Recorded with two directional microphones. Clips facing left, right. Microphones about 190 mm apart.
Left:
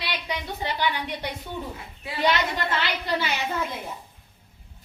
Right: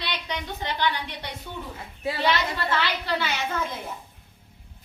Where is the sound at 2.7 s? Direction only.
15° left (ahead or behind).